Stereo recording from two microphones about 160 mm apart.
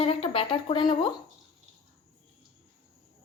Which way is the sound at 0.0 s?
35° left (ahead or behind).